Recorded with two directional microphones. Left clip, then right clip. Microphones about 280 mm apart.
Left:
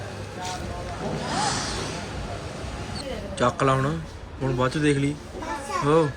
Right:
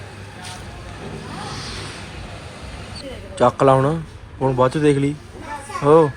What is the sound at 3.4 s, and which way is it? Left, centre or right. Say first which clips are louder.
A man's voice: right 8 dB; centre.